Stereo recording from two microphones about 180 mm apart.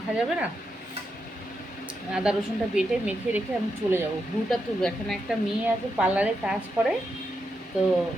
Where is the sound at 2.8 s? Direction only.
5° right (ahead or behind).